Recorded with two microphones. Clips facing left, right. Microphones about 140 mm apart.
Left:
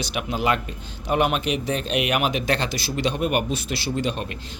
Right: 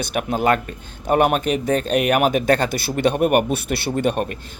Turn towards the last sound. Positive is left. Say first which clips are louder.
# right 5 dB
turn(degrees=-55)  # may be behind; listen again after turning